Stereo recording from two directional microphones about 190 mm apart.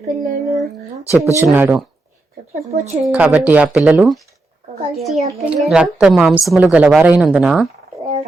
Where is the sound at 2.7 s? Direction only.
35° right (ahead or behind).